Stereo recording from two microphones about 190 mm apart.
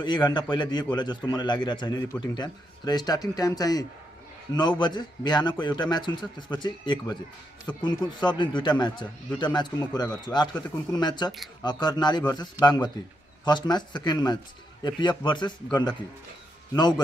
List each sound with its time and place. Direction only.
0.0 s a man's voice: 25° left (ahead or behind)